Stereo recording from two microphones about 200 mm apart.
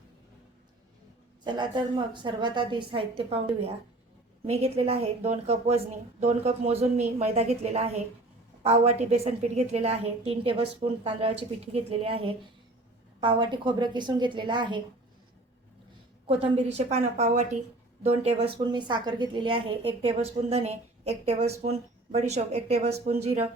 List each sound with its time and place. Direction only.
1.5 s a woman's voice: 20° right (ahead or behind)
16.2 s a woman's voice: 30° right (ahead or behind)